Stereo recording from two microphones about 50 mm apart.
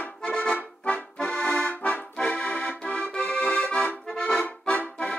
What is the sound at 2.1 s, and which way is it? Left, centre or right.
Accordion, left.